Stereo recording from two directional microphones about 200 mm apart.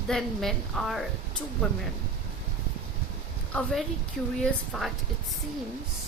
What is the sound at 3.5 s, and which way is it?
A woman's voice, 5° left (ahead or behind).